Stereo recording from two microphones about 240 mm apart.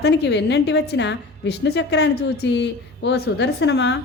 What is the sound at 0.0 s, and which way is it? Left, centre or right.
A woman's voice, left.